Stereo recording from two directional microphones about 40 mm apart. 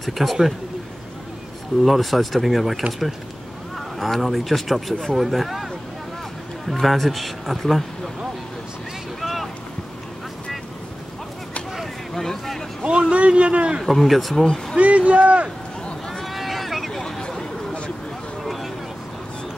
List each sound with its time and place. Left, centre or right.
0.0 s speech: centre
1.8 s speech: centre
6.7 s speech: centre
9.2 s boat: centre
11.7 s vehicle: centre
13.1 s speech: right
13.8 s speech: centre
14.4 s speech: centre
14.8 s speech: right
16.3 s vehicle: centre
18.4 s vehicle: centre